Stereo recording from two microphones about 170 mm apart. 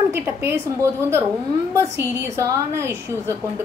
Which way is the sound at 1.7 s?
15° right (ahead or behind).